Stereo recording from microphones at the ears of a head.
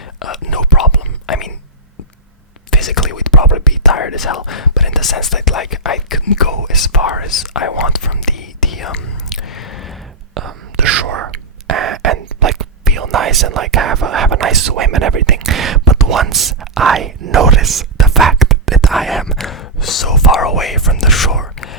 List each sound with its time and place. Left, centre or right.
0.2 s whispering: left
2.7 s whispering: left
10.3 s whispering: right
18.9 s whispering: centre
19.5 s whispering: left